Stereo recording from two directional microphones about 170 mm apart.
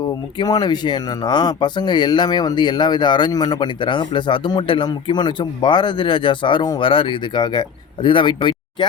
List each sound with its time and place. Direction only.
0.3 s speech: 25° left (ahead or behind)